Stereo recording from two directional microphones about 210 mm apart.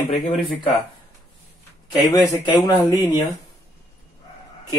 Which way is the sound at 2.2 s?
15° left (ahead or behind).